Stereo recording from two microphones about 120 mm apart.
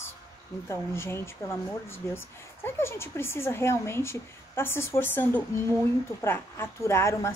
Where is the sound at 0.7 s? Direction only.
20° left (ahead or behind).